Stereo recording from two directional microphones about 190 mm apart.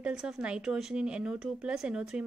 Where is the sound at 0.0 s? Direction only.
5° right (ahead or behind).